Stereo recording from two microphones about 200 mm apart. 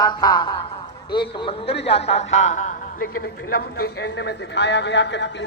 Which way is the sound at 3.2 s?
50° left (ahead or behind).